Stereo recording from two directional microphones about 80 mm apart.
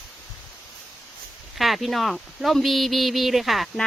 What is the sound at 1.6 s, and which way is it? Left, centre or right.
Speech, centre.